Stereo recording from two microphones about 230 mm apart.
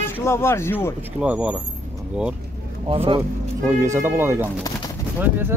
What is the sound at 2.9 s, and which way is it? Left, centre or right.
Speech, right.